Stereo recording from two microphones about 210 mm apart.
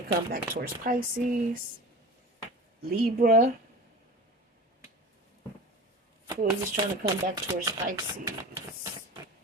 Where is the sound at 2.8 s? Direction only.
40° right (ahead or behind).